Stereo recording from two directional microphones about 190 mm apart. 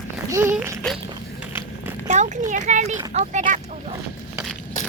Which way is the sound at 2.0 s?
40° right (ahead or behind).